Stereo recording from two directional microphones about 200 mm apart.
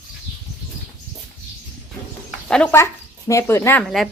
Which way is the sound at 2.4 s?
5° left (ahead or behind).